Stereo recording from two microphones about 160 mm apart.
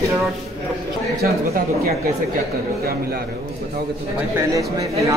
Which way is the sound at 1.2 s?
70° right (ahead or behind).